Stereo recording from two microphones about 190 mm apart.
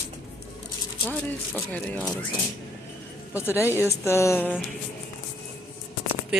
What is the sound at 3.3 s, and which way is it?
Speech, 15° left (ahead or behind).